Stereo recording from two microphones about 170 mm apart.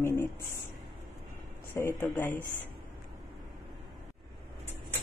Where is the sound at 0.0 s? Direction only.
15° left (ahead or behind).